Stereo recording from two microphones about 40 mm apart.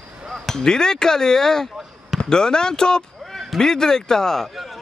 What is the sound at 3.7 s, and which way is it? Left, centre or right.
Speech, centre.